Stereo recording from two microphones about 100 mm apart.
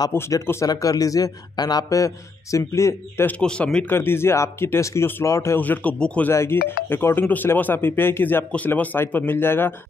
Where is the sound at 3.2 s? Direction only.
10° left (ahead or behind).